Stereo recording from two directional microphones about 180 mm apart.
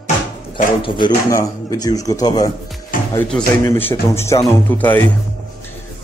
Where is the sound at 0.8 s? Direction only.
25° left (ahead or behind); by 5.0 s 10° left (ahead or behind).